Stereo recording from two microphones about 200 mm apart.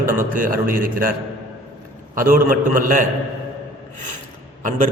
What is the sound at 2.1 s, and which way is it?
Speech, 45° right (ahead or behind).